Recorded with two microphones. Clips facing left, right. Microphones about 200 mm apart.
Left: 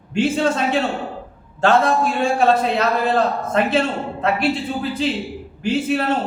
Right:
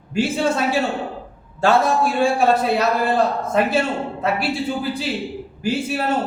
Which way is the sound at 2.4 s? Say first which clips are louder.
Even; 10° right (ahead or behind).